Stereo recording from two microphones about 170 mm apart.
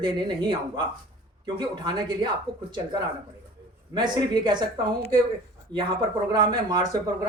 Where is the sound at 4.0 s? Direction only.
25° right (ahead or behind).